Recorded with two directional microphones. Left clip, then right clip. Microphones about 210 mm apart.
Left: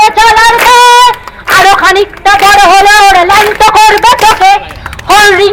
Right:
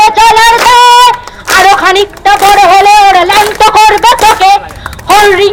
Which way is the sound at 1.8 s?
20° right (ahead or behind).